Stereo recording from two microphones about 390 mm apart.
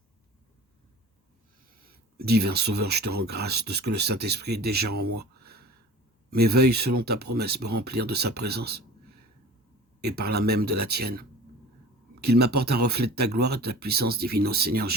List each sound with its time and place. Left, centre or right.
1.8 s speech: right
5.2 s a sound: right
6.3 s speech: right
10.0 s speech: right